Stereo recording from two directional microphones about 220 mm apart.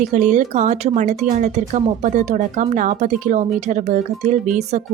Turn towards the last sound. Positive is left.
turn(degrees=-35)  # may be behind; listen again after turning